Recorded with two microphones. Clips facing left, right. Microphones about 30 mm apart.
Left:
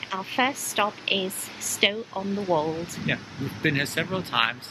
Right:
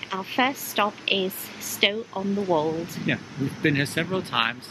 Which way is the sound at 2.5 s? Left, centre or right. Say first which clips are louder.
Even; centre.